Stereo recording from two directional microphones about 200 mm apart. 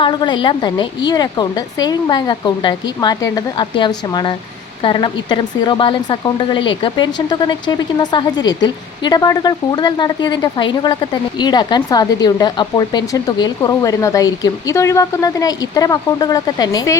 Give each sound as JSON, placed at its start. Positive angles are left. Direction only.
{"t": 0.0, "sound": "a woman's voice", "side_deg": 25}